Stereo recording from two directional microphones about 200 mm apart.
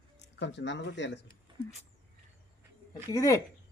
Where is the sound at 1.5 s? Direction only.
25° right (ahead or behind).